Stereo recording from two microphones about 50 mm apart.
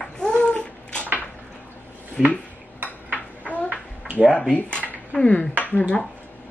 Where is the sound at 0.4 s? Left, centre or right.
Left.